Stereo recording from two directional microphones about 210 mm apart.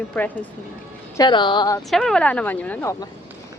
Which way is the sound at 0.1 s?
5° left (ahead or behind).